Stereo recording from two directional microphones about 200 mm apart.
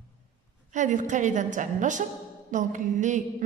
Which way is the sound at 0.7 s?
40° right (ahead or behind).